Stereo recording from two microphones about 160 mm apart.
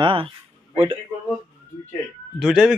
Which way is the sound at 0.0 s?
35° right (ahead or behind).